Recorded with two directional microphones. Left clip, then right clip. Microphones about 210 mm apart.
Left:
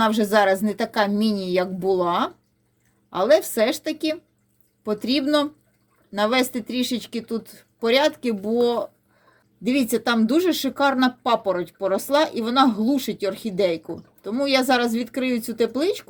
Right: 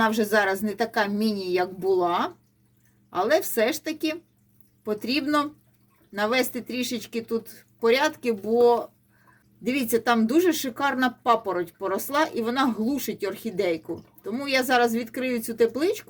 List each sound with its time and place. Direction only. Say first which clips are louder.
0.0 s speech: left 3 dB; 20° left (ahead or behind)